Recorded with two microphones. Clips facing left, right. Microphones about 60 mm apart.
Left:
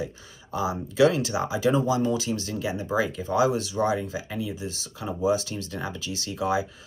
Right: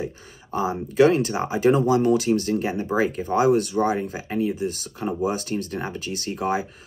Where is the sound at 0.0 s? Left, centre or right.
Right.